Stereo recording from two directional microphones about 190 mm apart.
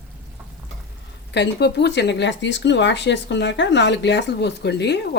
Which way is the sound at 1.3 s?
65° left (ahead or behind).